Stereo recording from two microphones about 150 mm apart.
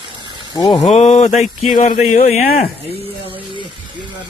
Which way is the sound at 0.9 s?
45° left (ahead or behind).